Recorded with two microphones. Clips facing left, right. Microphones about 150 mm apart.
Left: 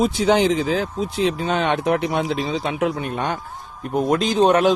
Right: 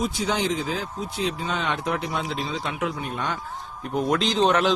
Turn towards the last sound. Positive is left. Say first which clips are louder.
# left 5 dB
turn(degrees=50)  # may be behind; listen again after turning